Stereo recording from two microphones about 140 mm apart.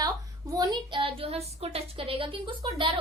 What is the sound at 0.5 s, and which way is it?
A woman's voice, 30° right (ahead or behind).